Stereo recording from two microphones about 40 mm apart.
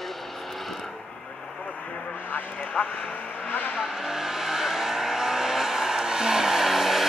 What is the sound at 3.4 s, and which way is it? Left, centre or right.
Vehicle, left.